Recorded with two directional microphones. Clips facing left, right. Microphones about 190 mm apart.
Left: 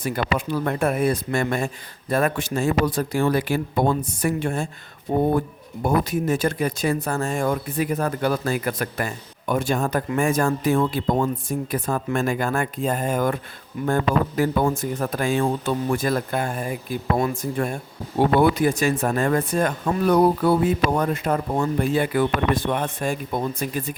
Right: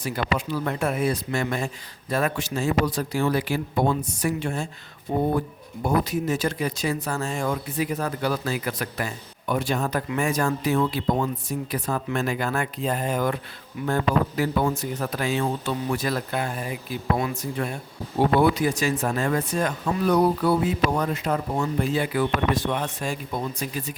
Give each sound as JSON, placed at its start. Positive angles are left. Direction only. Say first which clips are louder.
{"t": 0.0, "sound": "speech", "louder": "left 2 dB", "side_deg": 55}
{"t": 5.8, "sound": "speech", "louder": "left 2 dB", "side_deg": 50}